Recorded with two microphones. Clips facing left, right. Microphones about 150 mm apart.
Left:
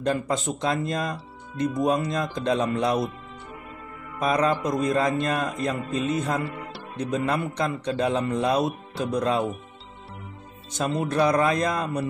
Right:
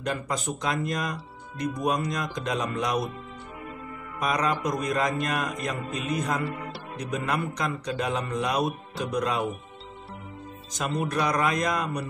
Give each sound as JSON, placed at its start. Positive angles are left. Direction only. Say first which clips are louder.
{"t": 0.0, "sound": "mantra", "louder": "left 5 dB", "side_deg": 25}
{"t": 4.3, "sound": "mantra", "louder": "left 4 dB", "side_deg": 30}
{"t": 10.7, "sound": "mantra", "louder": "left 3 dB", "side_deg": 30}